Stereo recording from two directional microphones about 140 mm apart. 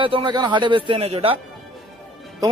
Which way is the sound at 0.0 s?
35° right (ahead or behind).